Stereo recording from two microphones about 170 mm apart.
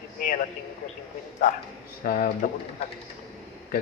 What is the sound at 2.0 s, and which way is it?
Speech, 55° left (ahead or behind).